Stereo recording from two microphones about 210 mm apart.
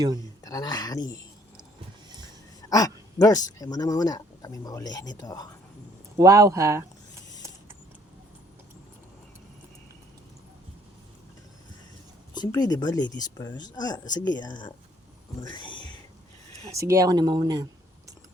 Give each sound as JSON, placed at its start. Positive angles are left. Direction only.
{"t": 0.4, "sound": "speech", "side_deg": 15}
{"t": 2.6, "sound": "speech", "side_deg": 15}
{"t": 6.1, "sound": "speech", "side_deg": -15}
{"t": 12.3, "sound": "speech", "side_deg": 20}
{"t": 16.7, "sound": "speech", "side_deg": -15}